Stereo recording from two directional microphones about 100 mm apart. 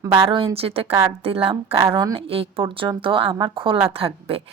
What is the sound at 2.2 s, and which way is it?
A woman's voice, 70° right (ahead or behind).